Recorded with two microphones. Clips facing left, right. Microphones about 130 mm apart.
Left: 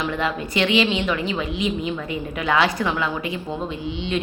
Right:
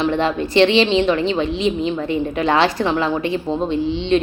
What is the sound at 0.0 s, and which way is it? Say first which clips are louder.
A woman's voice: right 6 dB; 30° right (ahead or behind).